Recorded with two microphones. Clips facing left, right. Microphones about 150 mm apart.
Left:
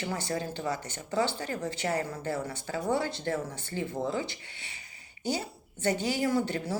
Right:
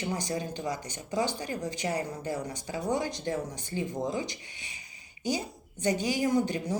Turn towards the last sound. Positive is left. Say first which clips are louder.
# right 1 dB
turn(degrees=-15)  # may be behind; listen again after turning